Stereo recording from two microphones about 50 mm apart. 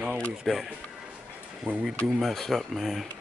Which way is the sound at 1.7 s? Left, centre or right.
Right.